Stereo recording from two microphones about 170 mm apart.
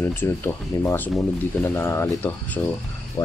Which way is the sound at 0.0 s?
15° left (ahead or behind).